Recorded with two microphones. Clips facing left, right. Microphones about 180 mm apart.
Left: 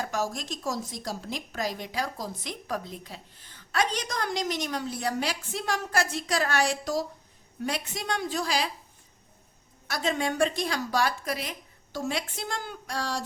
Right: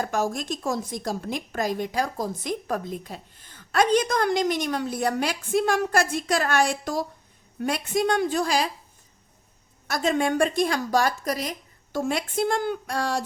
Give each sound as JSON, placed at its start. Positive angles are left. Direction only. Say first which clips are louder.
{"t": 0.0, "sound": "a woman's voice", "louder": "right 5 dB", "side_deg": -50}
{"t": 9.8, "sound": "a woman's voice", "louder": "right 5 dB", "side_deg": -45}